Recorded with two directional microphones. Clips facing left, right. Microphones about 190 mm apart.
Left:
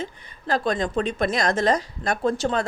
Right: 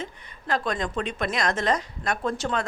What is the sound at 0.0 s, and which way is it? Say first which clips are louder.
Speech: left 3 dB; 35° left (ahead or behind).